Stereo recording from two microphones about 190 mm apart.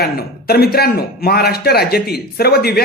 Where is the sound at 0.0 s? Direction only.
55° left (ahead or behind).